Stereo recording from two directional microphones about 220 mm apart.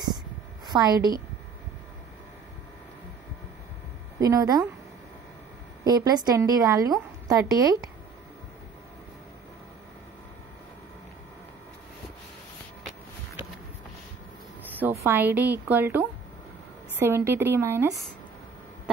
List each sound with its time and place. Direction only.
0.7 s a woman's voice: 15° right (ahead or behind)
4.2 s a woman's voice: 15° right (ahead or behind)
5.9 s a woman's voice: 15° right (ahead or behind)
14.8 s a woman's voice: 10° right (ahead or behind)